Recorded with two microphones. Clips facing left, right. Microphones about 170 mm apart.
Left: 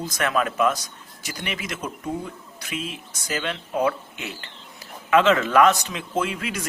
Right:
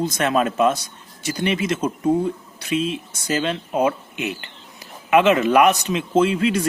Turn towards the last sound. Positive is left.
turn(degrees=-30)  # may be behind; listen again after turning